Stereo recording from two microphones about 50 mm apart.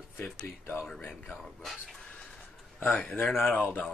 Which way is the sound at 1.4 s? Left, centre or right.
Centre.